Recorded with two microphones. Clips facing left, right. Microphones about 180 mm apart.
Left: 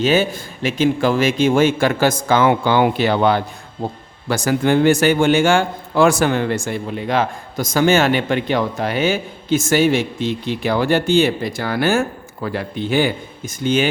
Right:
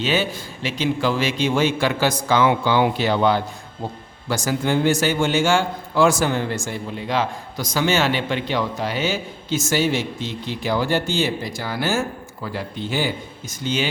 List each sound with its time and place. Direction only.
0.0 s a man's voice: 45° left (ahead or behind)